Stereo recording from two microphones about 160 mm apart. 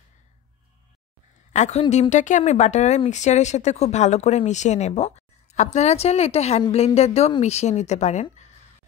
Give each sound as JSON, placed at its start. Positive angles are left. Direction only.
{"t": 1.5, "sound": "speech", "side_deg": 45}